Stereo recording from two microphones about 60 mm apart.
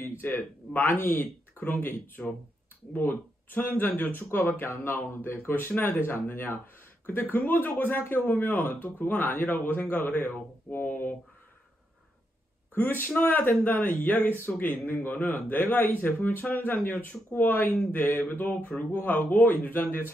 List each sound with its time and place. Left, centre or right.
0.0 s a sound: left
0.4 s speech: left
12.7 s speech: left